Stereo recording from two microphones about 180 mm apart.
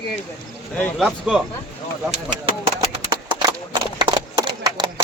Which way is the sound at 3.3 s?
25° right (ahead or behind).